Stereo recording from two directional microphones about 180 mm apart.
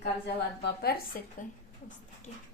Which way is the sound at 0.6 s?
60° left (ahead or behind).